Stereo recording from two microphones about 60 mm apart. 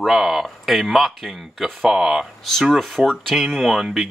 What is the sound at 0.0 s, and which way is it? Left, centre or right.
Speech, centre.